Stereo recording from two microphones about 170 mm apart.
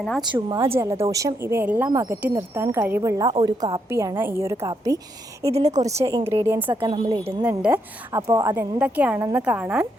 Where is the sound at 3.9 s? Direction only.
15° right (ahead or behind).